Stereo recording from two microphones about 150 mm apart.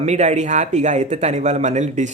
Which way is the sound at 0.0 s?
50° right (ahead or behind).